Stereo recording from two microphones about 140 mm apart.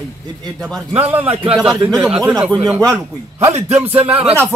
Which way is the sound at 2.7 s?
20° right (ahead or behind).